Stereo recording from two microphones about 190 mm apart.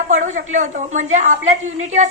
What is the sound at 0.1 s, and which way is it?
A woman's voice, 40° right (ahead or behind).